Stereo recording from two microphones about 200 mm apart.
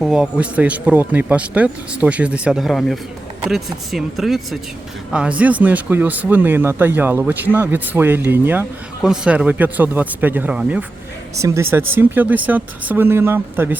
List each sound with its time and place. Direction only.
0.0 s speech: 5° right (ahead or behind)